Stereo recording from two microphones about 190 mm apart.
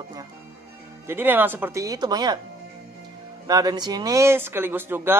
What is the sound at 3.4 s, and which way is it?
Speech, 20° right (ahead or behind).